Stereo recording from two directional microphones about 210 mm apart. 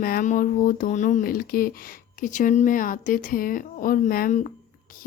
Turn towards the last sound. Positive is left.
turn(degrees=35)  # may be behind; listen again after turning